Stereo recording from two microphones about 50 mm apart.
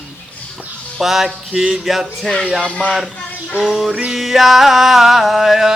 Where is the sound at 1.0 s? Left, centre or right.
Centre.